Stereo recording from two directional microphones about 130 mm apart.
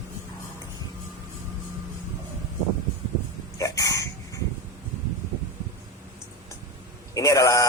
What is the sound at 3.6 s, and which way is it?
Hiccup, 25° left (ahead or behind).